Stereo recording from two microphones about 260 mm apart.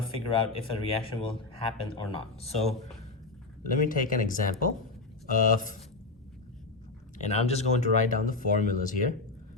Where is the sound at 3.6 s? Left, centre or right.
Left.